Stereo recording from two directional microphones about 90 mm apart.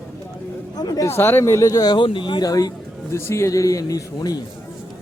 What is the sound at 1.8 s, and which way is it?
Speech, 65° left (ahead or behind).